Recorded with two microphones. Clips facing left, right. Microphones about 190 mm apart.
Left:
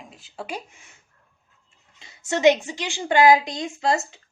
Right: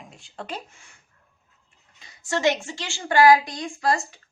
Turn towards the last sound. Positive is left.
turn(degrees=25)  # may be behind; listen again after turning